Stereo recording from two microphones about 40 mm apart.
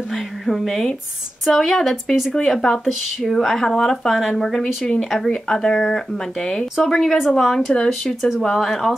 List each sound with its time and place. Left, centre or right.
0.5 s a woman's voice: centre